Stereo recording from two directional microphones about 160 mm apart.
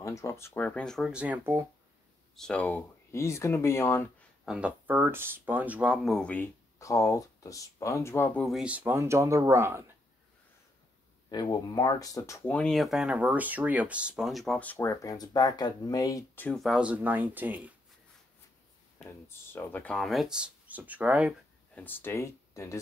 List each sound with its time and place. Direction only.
0.0 s speech: 15° left (ahead or behind); by 1.7 s 15° right (ahead or behind)
2.3 s speech: 5° left (ahead or behind)
4.5 s speech: 5° right (ahead or behind); by 8.5 s 15° left (ahead or behind)
8.5 s speech: 5° right (ahead or behind)
11.3 s speech: 25° left (ahead or behind)
16.4 s speech: centre (ahead or behind)
19.0 s speech: 15° left (ahead or behind); by 21.4 s 10° right (ahead or behind)
21.7 s speech: 10° left (ahead or behind)